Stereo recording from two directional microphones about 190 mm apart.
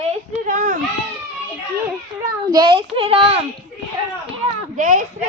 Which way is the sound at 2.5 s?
25° right (ahead or behind).